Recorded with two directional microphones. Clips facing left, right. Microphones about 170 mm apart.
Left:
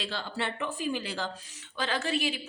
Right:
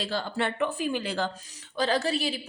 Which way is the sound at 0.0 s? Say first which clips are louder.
Right 5 dB; 45° right (ahead or behind).